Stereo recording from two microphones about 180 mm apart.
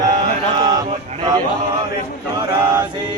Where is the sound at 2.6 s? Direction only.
10° right (ahead or behind).